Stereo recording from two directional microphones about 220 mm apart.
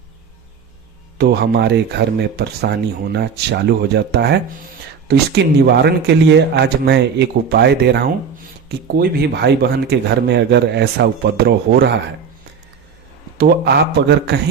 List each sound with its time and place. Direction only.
1.2 s speech: 50° right (ahead or behind)
13.4 s speech: 50° right (ahead or behind)